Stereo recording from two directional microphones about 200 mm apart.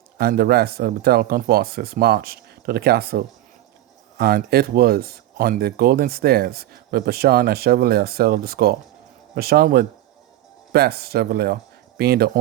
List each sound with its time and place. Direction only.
0.2 s speech: 50° right (ahead or behind)